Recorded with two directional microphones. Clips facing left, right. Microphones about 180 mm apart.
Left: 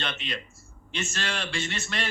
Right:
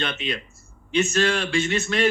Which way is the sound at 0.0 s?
55° right (ahead or behind).